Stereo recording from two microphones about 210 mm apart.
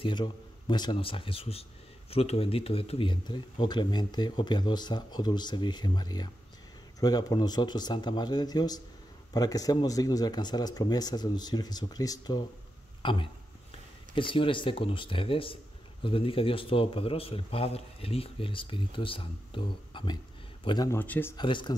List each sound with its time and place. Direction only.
0.0 s speech: 20° left (ahead or behind)
21.4 s speech: 20° left (ahead or behind)